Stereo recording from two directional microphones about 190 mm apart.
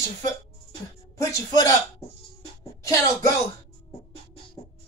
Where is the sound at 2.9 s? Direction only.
15° left (ahead or behind).